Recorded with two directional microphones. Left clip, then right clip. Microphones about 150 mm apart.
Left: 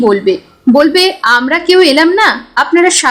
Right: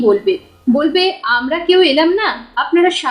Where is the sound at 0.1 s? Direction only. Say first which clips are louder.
Left 3 dB; 45° left (ahead or behind).